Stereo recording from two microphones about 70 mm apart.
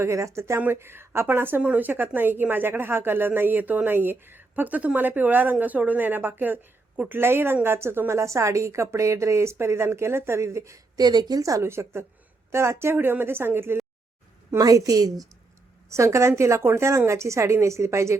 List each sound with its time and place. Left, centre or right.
0.0 s a woman's voice: right
10.9 s a woman's voice: right
14.6 s a woman's voice: right
15.9 s a woman's voice: right